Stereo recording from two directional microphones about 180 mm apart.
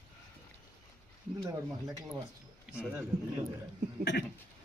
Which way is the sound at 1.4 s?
20° right (ahead or behind).